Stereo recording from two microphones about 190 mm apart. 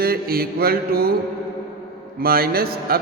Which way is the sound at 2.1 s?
50° right (ahead or behind).